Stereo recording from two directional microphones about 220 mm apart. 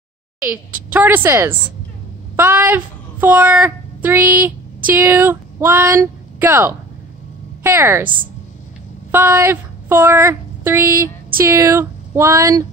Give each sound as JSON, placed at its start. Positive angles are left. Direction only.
{"t": 0.4, "sound": "a child's voice", "side_deg": -10}
{"t": 9.1, "sound": "speech", "side_deg": -10}